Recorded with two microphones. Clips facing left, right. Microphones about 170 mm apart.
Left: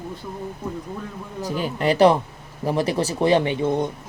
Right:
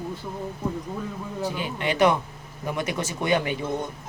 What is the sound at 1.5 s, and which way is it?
Speech, 40° left (ahead or behind).